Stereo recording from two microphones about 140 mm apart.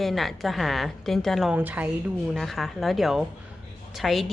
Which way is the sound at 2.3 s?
Centre (ahead or behind).